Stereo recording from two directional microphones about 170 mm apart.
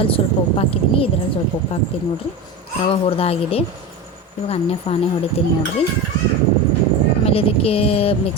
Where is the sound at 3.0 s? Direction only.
35° left (ahead or behind).